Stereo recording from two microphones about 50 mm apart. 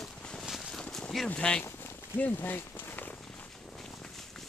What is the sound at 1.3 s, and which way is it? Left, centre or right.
Speech, left.